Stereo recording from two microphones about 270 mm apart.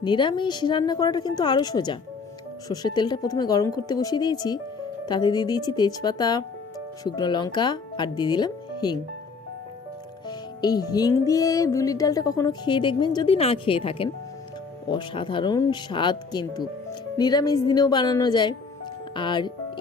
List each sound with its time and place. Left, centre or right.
0.0 s music: centre
10.2 s music: centre